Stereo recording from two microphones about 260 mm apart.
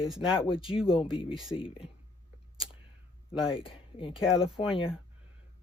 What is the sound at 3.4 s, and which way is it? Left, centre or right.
Speech, centre.